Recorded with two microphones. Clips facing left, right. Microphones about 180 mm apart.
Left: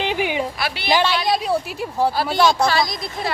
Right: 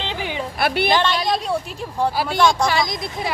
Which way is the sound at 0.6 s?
55° right (ahead or behind).